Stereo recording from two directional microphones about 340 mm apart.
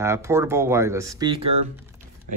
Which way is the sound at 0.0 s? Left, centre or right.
Centre.